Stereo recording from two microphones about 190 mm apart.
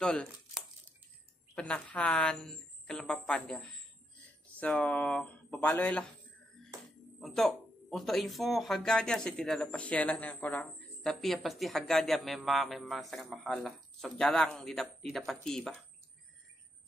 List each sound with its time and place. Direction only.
0.0 s speech: 5° left (ahead or behind)
7.2 s speech: centre (ahead or behind)